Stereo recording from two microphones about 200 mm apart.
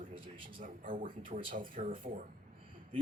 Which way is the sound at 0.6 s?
40° right (ahead or behind).